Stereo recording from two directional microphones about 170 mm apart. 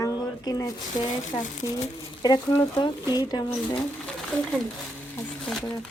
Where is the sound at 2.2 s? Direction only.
25° left (ahead or behind).